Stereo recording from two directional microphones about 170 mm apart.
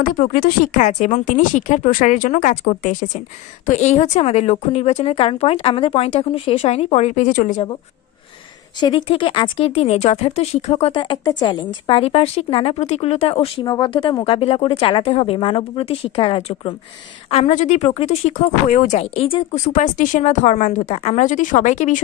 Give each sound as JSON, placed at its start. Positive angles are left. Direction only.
{"t": 0.0, "sound": "a woman's voice", "side_deg": 55}
{"t": 8.7, "sound": "a woman's voice", "side_deg": 30}
{"t": 10.9, "sound": "a woman's voice", "side_deg": 25}
{"t": 19.5, "sound": "speech", "side_deg": 45}